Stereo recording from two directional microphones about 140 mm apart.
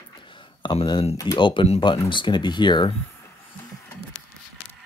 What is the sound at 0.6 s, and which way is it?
Speech, 35° left (ahead or behind).